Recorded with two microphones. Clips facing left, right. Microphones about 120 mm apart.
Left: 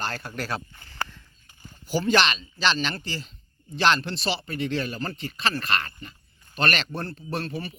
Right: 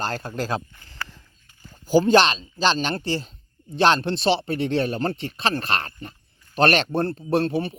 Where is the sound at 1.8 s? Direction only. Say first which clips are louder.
Right 6 dB; 45° right (ahead or behind).